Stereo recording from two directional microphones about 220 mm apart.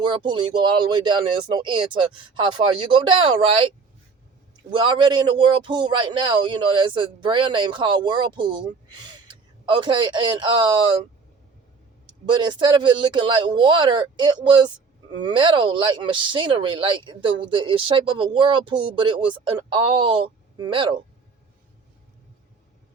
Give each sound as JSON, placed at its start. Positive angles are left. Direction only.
{"t": 0.0, "sound": "a man's voice", "side_deg": -20}
{"t": 4.7, "sound": "a man's voice", "side_deg": -20}
{"t": 12.2, "sound": "a man's voice", "side_deg": -20}